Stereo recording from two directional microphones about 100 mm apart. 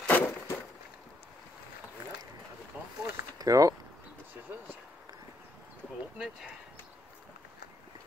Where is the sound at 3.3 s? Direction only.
35° right (ahead or behind).